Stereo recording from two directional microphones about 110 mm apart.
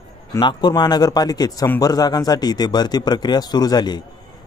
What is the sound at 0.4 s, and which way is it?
Speech, 40° left (ahead or behind).